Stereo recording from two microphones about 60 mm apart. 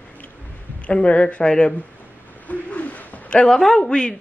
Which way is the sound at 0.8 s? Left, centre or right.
Left.